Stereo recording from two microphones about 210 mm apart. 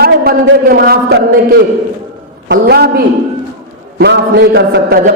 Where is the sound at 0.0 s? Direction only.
45° right (ahead or behind).